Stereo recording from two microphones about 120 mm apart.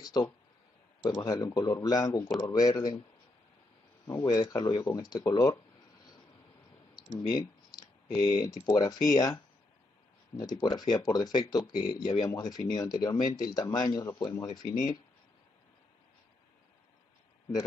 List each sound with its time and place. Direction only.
0.0 s a sound: 35° left (ahead or behind)
1.0 s speech: 30° left (ahead or behind)
4.1 s speech: 30° left (ahead or behind)
7.2 s speech: 30° left (ahead or behind)